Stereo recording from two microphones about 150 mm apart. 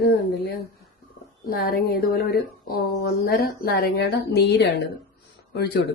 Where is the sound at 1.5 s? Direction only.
90° left.